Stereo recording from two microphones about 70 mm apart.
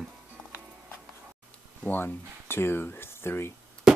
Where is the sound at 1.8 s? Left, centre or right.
Left.